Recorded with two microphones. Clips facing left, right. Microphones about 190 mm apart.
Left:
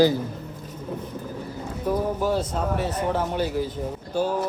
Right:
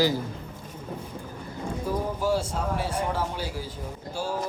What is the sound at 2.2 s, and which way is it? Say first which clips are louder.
Speech: left 2 dB; 10° right (ahead or behind).